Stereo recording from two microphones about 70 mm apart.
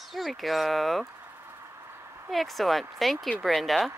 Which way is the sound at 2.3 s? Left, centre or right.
Centre.